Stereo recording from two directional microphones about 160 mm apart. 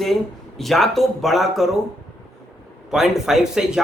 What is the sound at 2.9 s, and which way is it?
Speech, centre (ahead or behind).